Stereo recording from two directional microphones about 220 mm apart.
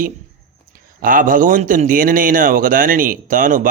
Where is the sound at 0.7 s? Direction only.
40° right (ahead or behind).